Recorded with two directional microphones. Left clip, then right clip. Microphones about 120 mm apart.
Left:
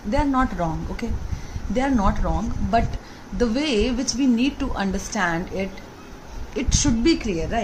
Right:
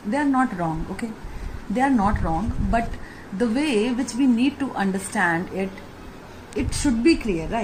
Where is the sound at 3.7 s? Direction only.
25° left (ahead or behind).